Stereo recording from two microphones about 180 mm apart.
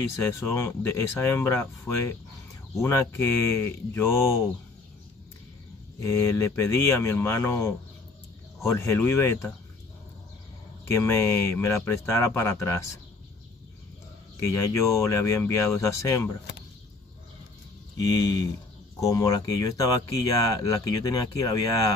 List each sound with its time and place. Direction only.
0.1 s speech: 15° left (ahead or behind)
5.9 s speech: 15° left (ahead or behind)
10.9 s speech: 15° left (ahead or behind)
14.4 s speech: 15° left (ahead or behind)
17.9 s speech: 20° left (ahead or behind)